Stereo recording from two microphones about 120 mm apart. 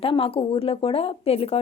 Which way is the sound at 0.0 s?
50° left (ahead or behind).